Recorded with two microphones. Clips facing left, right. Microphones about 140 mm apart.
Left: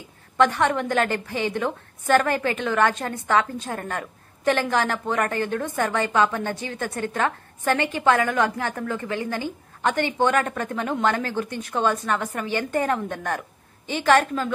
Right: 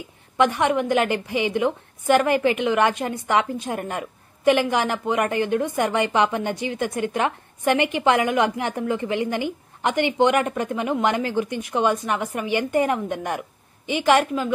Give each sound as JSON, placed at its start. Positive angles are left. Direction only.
{"t": 0.4, "sound": "a woman's voice", "side_deg": -15}